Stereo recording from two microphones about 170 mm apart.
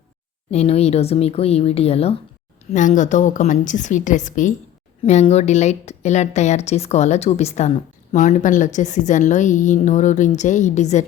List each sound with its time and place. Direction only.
0.5 s a woman's voice: 40° left (ahead or behind)
2.7 s a woman's voice: 45° left (ahead or behind)